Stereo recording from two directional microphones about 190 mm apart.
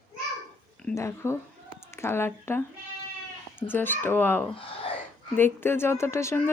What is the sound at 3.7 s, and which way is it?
Speech, 10° left (ahead or behind).